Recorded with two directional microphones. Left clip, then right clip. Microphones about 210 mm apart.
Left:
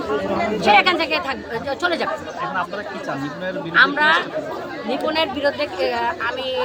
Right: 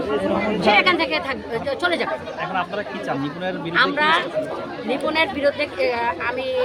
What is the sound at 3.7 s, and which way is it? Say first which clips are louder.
A woman's voice: left 3 dB; 5° right (ahead or behind).